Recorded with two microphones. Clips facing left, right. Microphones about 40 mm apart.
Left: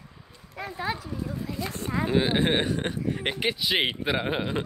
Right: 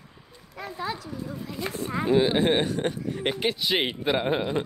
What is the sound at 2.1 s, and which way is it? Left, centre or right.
Speech, centre.